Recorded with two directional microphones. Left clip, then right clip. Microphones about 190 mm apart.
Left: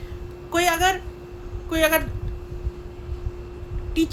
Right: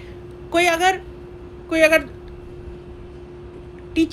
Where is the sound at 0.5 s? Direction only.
15° left (ahead or behind).